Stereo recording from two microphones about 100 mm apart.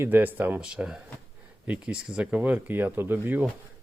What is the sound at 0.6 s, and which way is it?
Speech, 10° right (ahead or behind).